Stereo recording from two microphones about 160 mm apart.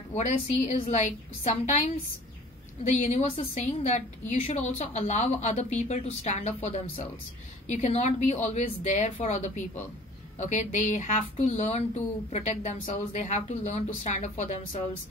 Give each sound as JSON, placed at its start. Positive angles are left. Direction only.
{"t": 0.1, "sound": "speech", "side_deg": 45}